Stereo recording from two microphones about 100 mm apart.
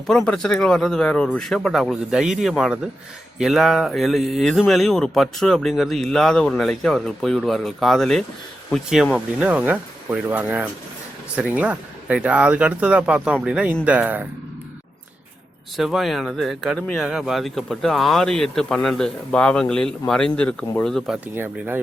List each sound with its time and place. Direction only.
0.1 s speech: 5° left (ahead or behind)
9.1 s speech: 10° right (ahead or behind)
15.8 s speech: centre (ahead or behind)
21.3 s speech: 20° right (ahead or behind)